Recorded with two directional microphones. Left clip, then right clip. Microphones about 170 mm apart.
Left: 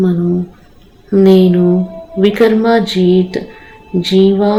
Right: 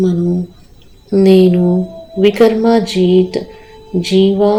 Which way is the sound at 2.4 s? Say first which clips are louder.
Left 2 dB; 40° right (ahead or behind).